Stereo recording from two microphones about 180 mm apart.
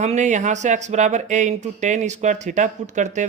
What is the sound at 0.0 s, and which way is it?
Speech, 40° right (ahead or behind).